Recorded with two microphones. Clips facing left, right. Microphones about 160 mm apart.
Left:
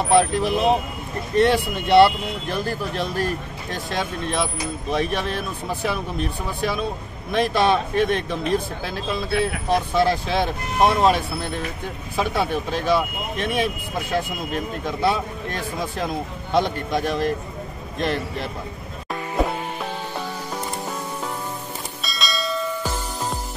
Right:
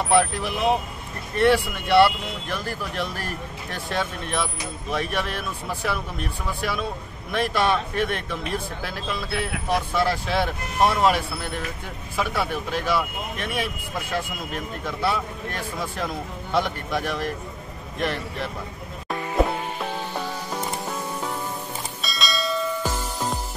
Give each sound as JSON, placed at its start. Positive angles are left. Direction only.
{"t": 0.1, "sound": "speech", "side_deg": 20}
{"t": 14.9, "sound": "speech", "side_deg": 15}
{"t": 19.0, "sound": "music", "side_deg": 0}
{"t": 22.0, "sound": "bell", "side_deg": 0}